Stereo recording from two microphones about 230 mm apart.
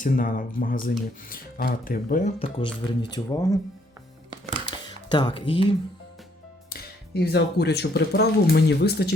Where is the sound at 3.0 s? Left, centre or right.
Centre.